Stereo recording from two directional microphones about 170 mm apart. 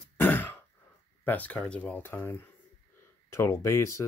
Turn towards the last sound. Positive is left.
turn(degrees=15)  # may be behind; listen again after turning